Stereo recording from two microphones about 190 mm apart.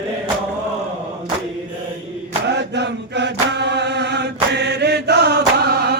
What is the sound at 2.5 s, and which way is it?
Chant, 65° right (ahead or behind).